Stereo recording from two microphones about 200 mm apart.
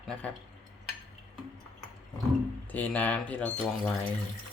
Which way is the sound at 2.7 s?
10° left (ahead or behind).